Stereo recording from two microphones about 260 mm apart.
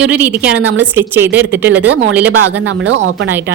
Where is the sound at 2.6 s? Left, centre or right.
Right.